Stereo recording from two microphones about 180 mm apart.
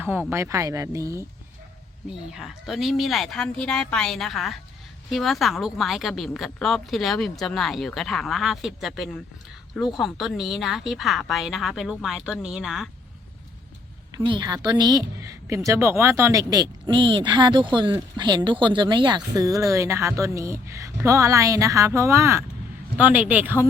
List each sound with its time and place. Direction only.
0.3 s speech: 15° right (ahead or behind)
2.0 s a woman's voice: 5° right (ahead or behind)
14.1 s a woman's voice: 25° right (ahead or behind); by 23.6 s 10° right (ahead or behind)